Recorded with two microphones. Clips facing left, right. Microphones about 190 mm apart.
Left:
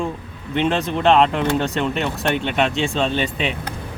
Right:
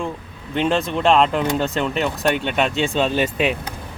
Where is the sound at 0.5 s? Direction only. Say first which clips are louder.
Even; centre (ahead or behind).